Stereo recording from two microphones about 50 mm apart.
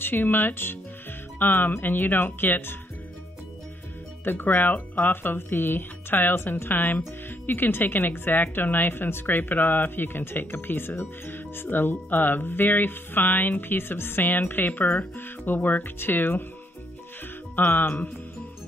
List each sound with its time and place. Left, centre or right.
0.0 s speech: left
4.2 s speech: left
17.6 s speech: left